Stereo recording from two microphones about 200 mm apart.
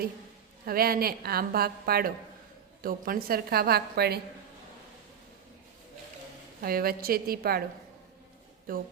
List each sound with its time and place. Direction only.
0.6 s a woman's voice: 50° right (ahead or behind)
6.6 s a woman's voice: 45° right (ahead or behind)
8.7 s a woman's voice: 45° right (ahead or behind)